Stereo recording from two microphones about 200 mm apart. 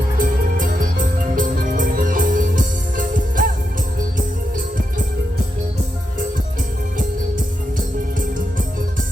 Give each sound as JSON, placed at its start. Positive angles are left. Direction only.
{"t": 0.2, "sound": "music", "side_deg": -45}